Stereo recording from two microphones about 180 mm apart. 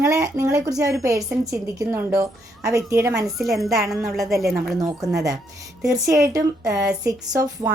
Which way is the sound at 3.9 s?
Centre (ahead or behind).